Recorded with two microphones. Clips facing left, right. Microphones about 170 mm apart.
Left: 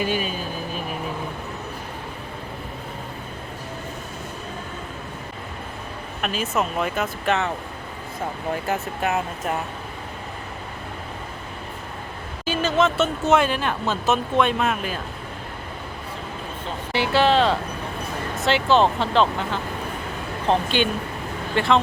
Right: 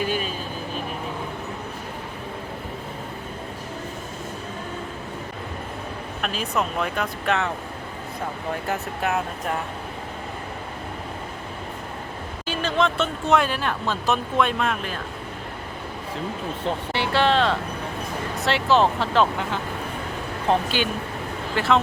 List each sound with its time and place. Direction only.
6.2 s speech: 5° left (ahead or behind)
8.6 s speech: centre (ahead or behind)
12.5 s speech: 5° left (ahead or behind)
16.9 s speech: centre (ahead or behind)